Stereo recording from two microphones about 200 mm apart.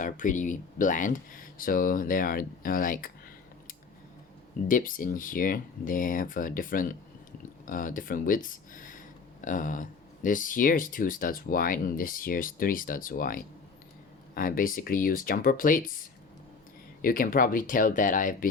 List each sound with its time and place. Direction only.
0.0 s speech: 40° left (ahead or behind)
4.7 s speech: 45° left (ahead or behind)